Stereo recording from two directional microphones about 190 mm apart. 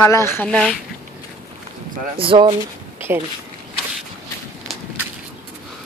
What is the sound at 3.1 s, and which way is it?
Speech, 10° right (ahead or behind).